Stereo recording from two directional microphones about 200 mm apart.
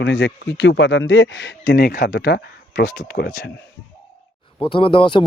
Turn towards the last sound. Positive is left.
turn(degrees=25)  # may be behind; listen again after turning